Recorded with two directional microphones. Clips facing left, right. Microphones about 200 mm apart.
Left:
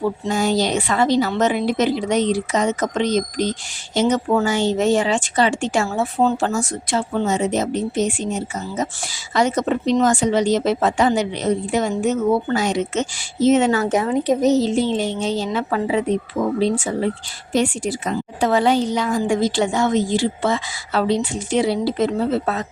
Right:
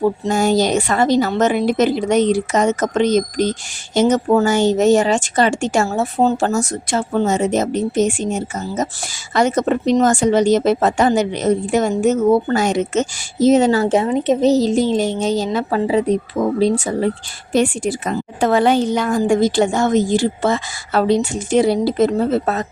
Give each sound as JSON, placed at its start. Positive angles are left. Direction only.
{"t": 0.0, "sound": "a woman's voice", "side_deg": -45}
{"t": 14.5, "sound": "speech", "side_deg": -40}
{"t": 17.5, "sound": "a woman's voice", "side_deg": -50}